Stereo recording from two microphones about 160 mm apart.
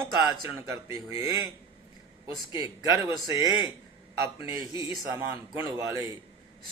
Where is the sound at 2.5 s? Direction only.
20° right (ahead or behind).